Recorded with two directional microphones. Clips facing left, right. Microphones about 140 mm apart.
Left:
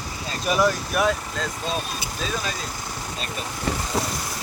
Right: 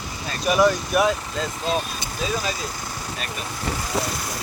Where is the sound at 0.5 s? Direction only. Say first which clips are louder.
Right 3 dB; 5° right (ahead or behind).